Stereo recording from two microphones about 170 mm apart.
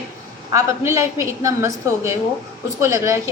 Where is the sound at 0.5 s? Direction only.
15° right (ahead or behind).